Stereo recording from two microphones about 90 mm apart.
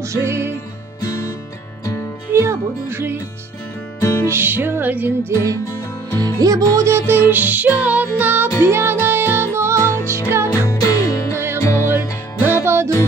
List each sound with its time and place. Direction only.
0.0 s music: 30° right (ahead or behind)
1.0 s music: 40° left (ahead or behind)
2.3 s music: 30° right (ahead or behind)
4.0 s music: 25° left (ahead or behind)
4.3 s music: 25° right (ahead or behind)
6.1 s music: 45° right (ahead or behind); by 10.5 s 30° right (ahead or behind)
10.7 s music: 40° left (ahead or behind)
11.6 s music: 30° left (ahead or behind)
12.4 s music: 30° right (ahead or behind)